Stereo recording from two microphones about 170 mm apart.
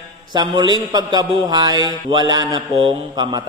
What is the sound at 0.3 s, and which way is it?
Mantra, 25° right (ahead or behind).